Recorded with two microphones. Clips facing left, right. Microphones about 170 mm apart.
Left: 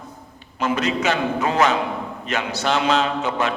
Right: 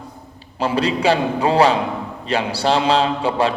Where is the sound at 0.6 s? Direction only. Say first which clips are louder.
Right 3 dB; 35° right (ahead or behind).